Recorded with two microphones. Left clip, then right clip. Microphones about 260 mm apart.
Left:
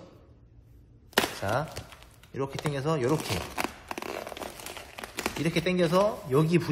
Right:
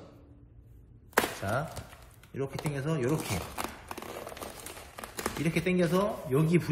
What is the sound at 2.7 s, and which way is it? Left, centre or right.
Speech, left.